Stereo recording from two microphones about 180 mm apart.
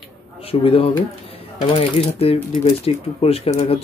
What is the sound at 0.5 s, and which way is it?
Speech, 30° left (ahead or behind).